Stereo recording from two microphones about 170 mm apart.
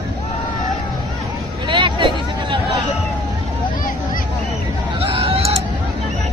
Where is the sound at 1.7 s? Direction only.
30° right (ahead or behind).